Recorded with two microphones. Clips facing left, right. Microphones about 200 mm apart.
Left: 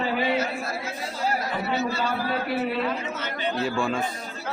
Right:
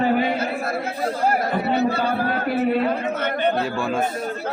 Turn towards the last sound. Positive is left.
turn(degrees=-55)  # may be behind; listen again after turning